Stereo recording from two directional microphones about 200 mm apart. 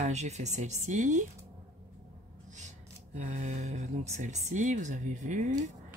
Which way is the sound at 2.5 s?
35° right (ahead or behind).